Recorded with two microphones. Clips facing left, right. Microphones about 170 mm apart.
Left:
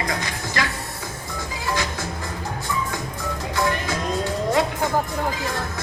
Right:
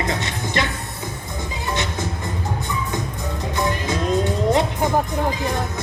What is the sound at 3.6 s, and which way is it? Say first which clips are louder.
Music: right 1 dB; 20° right (ahead or behind).